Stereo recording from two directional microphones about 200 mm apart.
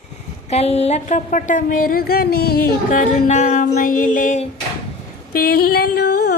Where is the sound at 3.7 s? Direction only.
40° left (ahead or behind).